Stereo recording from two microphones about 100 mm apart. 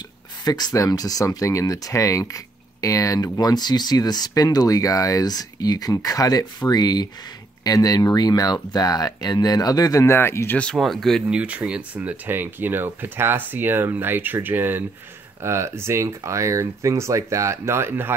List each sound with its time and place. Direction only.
0.5 s speech: 40° left (ahead or behind)
10.0 s speech: 25° left (ahead or behind)
10.6 s speech: 5° left (ahead or behind)
11.2 s speech: 15° right (ahead or behind)